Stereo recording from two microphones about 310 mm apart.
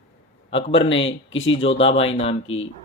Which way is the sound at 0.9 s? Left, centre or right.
Left.